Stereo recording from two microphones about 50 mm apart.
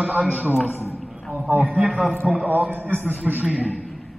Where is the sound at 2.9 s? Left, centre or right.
Right.